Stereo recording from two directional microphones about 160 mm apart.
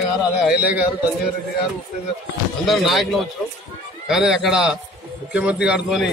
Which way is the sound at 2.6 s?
Centre (ahead or behind).